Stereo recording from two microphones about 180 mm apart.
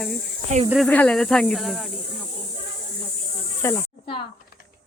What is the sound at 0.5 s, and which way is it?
Speech, 40° right (ahead or behind).